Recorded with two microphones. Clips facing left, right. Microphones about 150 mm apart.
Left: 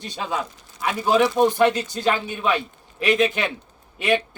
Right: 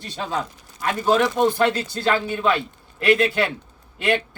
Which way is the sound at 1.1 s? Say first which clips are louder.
Left 1 dB; 10° left (ahead or behind).